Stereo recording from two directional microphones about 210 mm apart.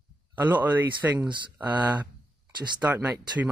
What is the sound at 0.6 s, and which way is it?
Speech, 5° right (ahead or behind).